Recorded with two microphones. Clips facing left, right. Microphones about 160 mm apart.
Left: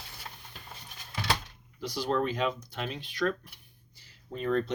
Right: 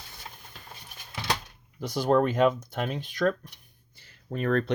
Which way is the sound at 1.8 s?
50° right (ahead or behind).